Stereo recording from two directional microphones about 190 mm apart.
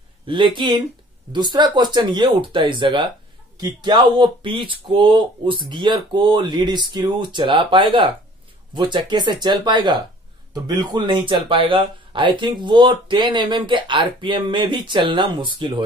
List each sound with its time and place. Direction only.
0.3 s speech: 25° right (ahead or behind)